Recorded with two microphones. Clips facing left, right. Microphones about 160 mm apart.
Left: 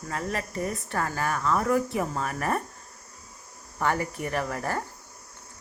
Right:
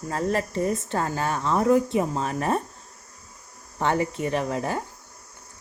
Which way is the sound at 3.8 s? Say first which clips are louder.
Right 3 dB; 20° right (ahead or behind).